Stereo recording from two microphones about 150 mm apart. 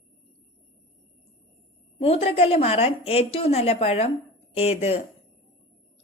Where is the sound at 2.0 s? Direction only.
40° left (ahead or behind).